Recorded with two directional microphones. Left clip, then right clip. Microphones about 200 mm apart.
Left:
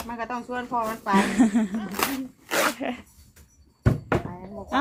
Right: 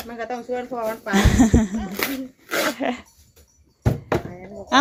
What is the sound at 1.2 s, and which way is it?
Speech, 15° right (ahead or behind).